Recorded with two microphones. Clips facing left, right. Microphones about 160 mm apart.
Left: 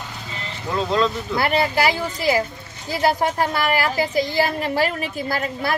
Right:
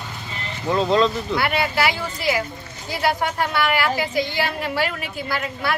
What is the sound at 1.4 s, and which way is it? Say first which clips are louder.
Speech: left 3 dB; 40° left (ahead or behind).